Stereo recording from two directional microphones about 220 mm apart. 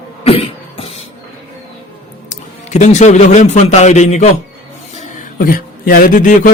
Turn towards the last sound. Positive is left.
turn(degrees=40)  # may be behind; listen again after turning